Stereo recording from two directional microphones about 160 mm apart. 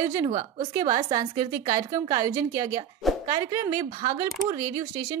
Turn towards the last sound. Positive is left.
turn(degrees=-20)  # may be behind; listen again after turning